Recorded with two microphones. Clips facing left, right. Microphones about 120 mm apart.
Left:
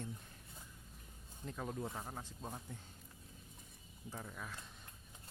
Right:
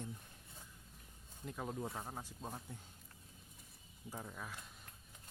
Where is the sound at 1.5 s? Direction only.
10° right (ahead or behind).